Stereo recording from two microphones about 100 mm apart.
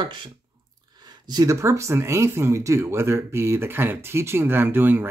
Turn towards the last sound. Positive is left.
turn(degrees=-20)  # may be behind; listen again after turning